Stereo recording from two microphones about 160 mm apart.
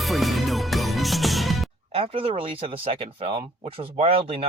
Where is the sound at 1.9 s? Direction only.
35° right (ahead or behind).